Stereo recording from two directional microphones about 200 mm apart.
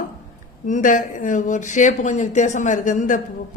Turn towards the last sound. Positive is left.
turn(degrees=40)  # may be behind; listen again after turning